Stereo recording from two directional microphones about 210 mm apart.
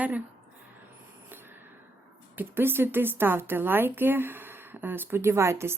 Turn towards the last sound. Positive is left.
turn(degrees=-10)  # may be behind; listen again after turning